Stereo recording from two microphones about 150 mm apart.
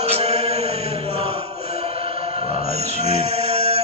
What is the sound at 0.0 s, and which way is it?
Mantra, 40° right (ahead or behind).